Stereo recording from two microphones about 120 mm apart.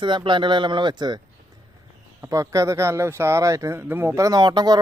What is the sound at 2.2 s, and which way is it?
Speech, 25° right (ahead or behind).